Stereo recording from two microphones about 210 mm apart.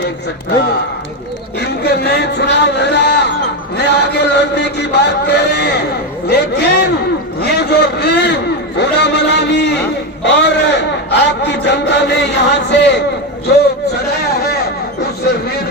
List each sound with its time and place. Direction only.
1.5 s speech: 50° left (ahead or behind)
3.8 s chant: 55° left (ahead or behind)
6.2 s speech: 50° left (ahead or behind)
8.8 s chant: 55° left (ahead or behind)
10.2 s speech: 55° left (ahead or behind)
13.5 s a sound: 50° left (ahead or behind)